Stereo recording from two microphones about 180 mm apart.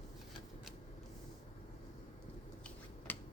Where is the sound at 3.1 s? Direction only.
10° left (ahead or behind).